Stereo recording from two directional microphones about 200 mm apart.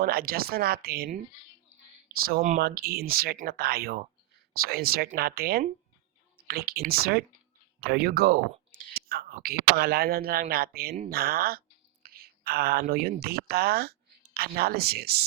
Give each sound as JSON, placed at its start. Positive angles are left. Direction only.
{"t": 0.0, "sound": "speech", "side_deg": -50}
{"t": 2.6, "sound": "speech", "side_deg": -50}